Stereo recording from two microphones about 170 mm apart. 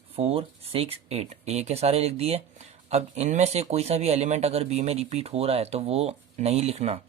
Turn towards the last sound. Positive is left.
turn(degrees=-40)  # may be behind; listen again after turning